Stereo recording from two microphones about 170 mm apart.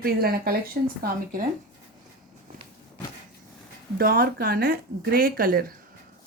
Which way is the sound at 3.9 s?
60° right (ahead or behind).